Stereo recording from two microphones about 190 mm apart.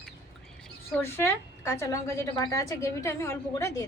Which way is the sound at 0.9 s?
10° left (ahead or behind).